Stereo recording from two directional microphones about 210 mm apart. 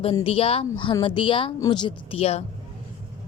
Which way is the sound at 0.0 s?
25° left (ahead or behind).